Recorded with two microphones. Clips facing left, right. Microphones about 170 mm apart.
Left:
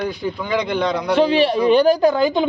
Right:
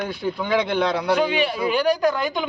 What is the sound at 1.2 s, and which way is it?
A man's voice, 35° left (ahead or behind).